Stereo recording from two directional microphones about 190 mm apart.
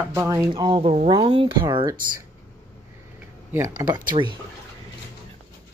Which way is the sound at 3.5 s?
15° right (ahead or behind).